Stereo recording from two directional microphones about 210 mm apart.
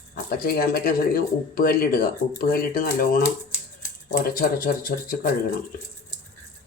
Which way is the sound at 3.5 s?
15° left (ahead or behind).